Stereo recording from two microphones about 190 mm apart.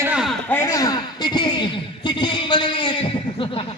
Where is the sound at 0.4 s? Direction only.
10° left (ahead or behind).